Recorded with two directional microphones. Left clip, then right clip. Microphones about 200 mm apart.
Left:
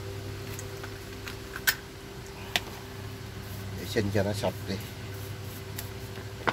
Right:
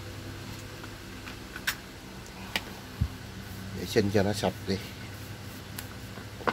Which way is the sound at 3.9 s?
50° right (ahead or behind).